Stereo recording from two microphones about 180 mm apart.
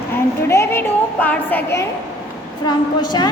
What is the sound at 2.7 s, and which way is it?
Speech, 25° left (ahead or behind).